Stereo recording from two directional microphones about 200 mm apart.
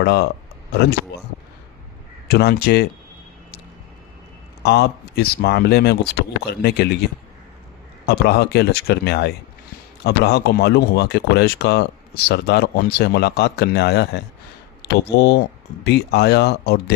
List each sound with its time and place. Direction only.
0.0 s speech: 55° left (ahead or behind)
2.2 s speech: 55° left (ahead or behind)
4.6 s speech: 55° left (ahead or behind)
14.8 s a sound: 55° left (ahead or behind)
15.2 s speech: 55° left (ahead or behind)